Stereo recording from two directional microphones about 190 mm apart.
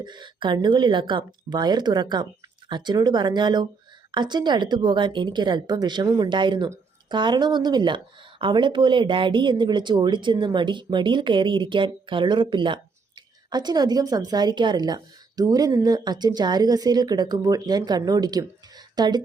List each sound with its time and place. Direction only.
0.0 s a woman's voice: 25° right (ahead or behind)